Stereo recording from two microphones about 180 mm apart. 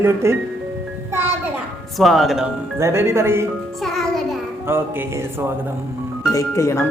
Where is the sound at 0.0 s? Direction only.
15° right (ahead or behind).